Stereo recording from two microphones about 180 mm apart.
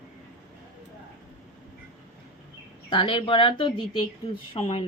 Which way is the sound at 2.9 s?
30° left (ahead or behind).